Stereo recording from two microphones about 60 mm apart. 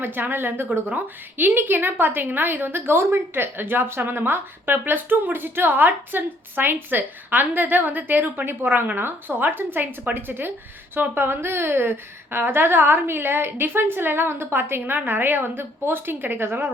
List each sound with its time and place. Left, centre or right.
0.0 s a woman's voice: right